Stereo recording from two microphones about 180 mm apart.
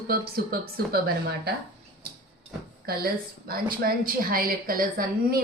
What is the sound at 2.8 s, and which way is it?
A woman's voice, 55° right (ahead or behind).